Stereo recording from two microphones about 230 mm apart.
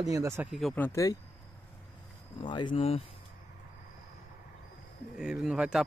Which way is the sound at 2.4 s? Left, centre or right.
Centre.